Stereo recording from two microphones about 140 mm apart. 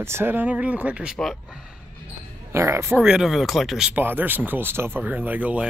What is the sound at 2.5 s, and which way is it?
Speech, 20° right (ahead or behind).